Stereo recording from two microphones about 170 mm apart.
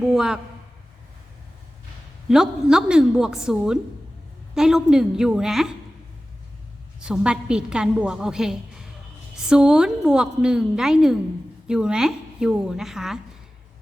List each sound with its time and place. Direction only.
0.0 s a woman's voice: 5° right (ahead or behind)
2.3 s a woman's voice: 5° right (ahead or behind)
7.0 s a woman's voice: 5° right (ahead or behind)